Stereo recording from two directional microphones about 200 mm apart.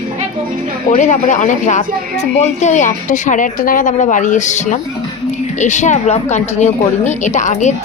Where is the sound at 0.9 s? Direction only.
35° left (ahead or behind).